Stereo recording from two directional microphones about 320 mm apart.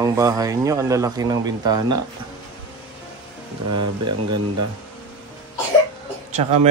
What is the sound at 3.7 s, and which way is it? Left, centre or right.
Speech, right.